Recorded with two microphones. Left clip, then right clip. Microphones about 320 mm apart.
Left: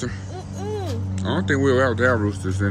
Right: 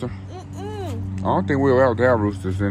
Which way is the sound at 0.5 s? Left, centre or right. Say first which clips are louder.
Left 2 dB; centre.